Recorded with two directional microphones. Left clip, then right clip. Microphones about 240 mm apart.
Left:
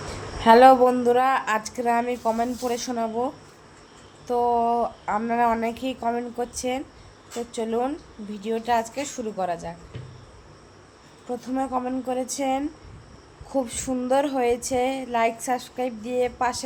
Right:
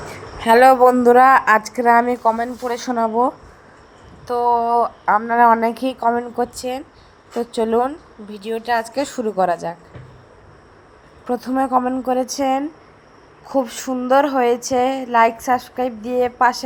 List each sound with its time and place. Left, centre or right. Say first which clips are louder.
0.3 s a woman's voice: right 3 dB; right
11.3 s a woman's voice: right 9 dB; right